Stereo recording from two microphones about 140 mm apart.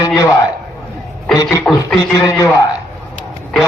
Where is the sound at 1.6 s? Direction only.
5° left (ahead or behind).